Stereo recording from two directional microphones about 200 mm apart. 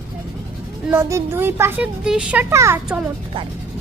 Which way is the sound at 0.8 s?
10° right (ahead or behind).